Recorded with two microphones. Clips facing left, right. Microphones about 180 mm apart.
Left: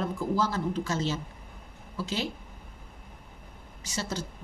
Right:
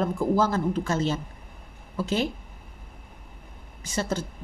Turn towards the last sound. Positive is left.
turn(degrees=-55)  # may be behind; listen again after turning